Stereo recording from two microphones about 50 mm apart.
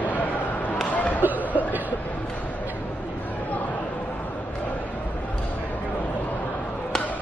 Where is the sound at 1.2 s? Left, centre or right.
Right.